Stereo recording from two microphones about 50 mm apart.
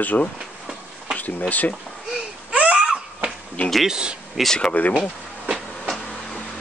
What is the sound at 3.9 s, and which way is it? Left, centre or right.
Speech, centre.